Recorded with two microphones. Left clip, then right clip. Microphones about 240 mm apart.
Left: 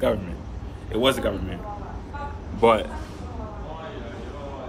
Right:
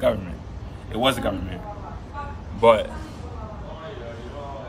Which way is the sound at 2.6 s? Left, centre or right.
Centre.